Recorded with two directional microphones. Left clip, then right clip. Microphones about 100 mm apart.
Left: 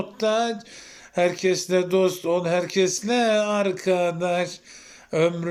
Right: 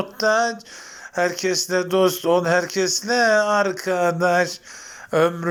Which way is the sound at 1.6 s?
45° left (ahead or behind).